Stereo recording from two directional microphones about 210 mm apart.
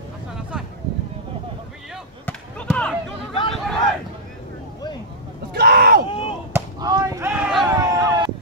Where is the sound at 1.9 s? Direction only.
5° left (ahead or behind).